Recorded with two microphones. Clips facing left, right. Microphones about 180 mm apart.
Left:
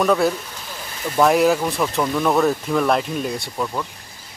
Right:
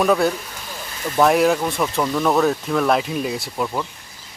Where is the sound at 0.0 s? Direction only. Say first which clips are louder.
Even; centre (ahead or behind).